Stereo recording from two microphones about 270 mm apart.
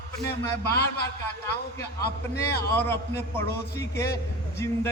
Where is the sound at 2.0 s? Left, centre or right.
Left.